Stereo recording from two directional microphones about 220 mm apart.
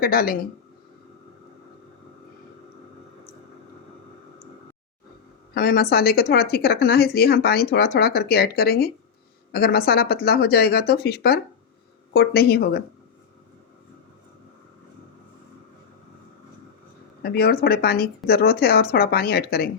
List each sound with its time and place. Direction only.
0.0 s speech: 40° left (ahead or behind)
5.5 s a woman's voice: 45° left (ahead or behind)
17.2 s a woman's voice: 45° left (ahead or behind)